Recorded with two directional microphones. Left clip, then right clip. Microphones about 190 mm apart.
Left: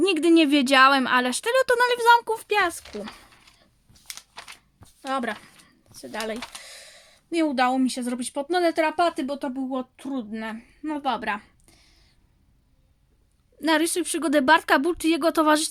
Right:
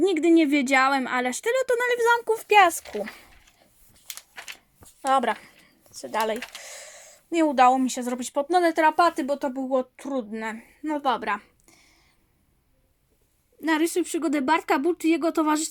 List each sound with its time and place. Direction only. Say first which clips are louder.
0.0 s speech: left 1 dB; 20° left (ahead or behind)
2.3 s a sound: right 6 dB; 5° right (ahead or behind)
6.0 s a woman's voice: right 5 dB; 15° right (ahead or behind)
13.6 s speech: left 1 dB; 20° left (ahead or behind)